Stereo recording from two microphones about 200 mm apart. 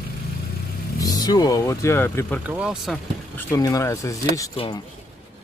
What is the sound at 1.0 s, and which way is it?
Speech, 20° left (ahead or behind).